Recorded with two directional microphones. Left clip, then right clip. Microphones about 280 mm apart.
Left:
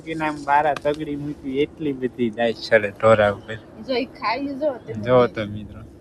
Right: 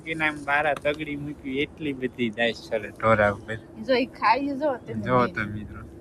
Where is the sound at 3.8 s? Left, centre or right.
Right.